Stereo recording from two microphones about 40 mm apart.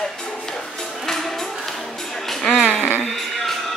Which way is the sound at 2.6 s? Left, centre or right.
Left.